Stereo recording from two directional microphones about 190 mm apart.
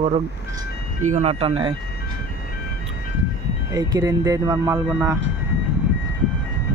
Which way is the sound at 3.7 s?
20° right (ahead or behind).